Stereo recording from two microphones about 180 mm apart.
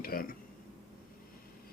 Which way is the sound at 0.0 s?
55° left (ahead or behind).